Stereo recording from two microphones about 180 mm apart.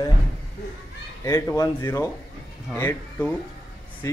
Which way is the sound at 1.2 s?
15° left (ahead or behind).